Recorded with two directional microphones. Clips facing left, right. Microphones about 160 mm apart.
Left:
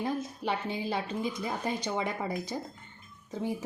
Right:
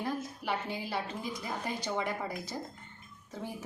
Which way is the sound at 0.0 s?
20° left (ahead or behind).